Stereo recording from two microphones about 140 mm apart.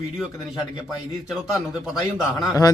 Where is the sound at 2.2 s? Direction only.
5° right (ahead or behind).